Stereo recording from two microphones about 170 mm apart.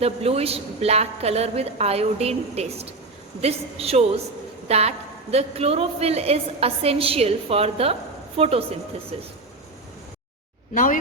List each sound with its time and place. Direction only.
0.0 s a woman's voice: 35° right (ahead or behind)